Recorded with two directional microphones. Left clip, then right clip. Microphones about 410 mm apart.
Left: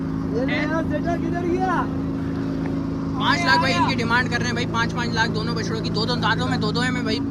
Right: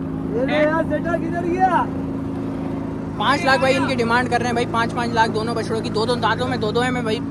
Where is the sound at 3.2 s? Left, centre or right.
Centre.